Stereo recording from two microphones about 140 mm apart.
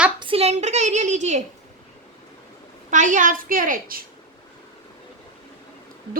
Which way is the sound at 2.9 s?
65° right (ahead or behind).